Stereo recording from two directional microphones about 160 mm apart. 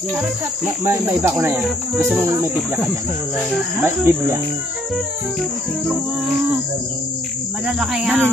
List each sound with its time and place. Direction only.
0.8 s speech: 15° right (ahead or behind)
3.8 s speech: 15° right (ahead or behind)
7.6 s speech: 5° right (ahead or behind)